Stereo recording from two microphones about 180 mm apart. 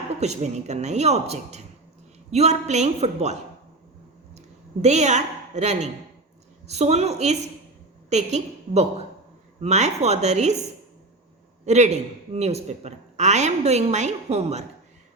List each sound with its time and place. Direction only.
0.2 s speech: 40° right (ahead or behind)
4.4 s a woman's voice: 40° right (ahead or behind)
11.6 s speech: 40° right (ahead or behind)